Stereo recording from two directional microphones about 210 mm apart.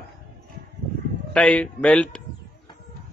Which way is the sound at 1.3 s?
5° left (ahead or behind).